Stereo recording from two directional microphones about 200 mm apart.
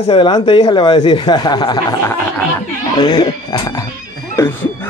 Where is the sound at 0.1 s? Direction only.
25° left (ahead or behind).